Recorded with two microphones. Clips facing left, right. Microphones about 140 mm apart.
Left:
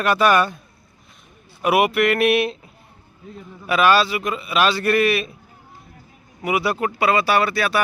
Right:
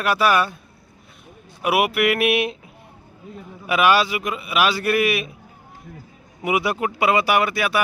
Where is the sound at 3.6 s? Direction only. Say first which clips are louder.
Left 1 dB; 15° right (ahead or behind).